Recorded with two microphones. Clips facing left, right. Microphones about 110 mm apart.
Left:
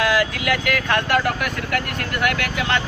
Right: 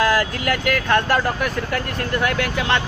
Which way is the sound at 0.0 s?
40° right (ahead or behind).